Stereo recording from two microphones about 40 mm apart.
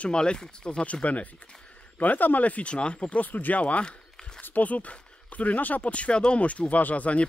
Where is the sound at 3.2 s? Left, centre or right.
Left.